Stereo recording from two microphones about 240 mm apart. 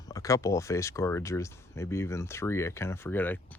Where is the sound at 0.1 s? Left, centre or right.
Centre.